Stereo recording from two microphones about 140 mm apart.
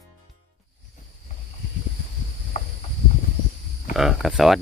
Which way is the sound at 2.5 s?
50° left (ahead or behind).